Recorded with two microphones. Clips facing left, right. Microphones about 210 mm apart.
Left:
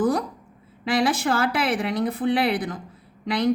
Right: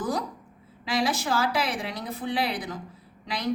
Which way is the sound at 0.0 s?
55° left (ahead or behind).